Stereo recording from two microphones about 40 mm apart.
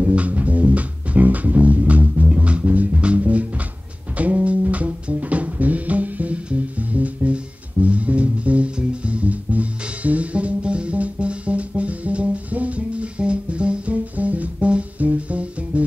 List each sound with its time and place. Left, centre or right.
0.0 s music: right